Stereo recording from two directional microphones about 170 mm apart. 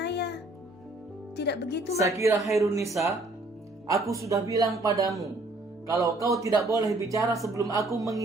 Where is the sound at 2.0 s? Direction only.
20° right (ahead or behind).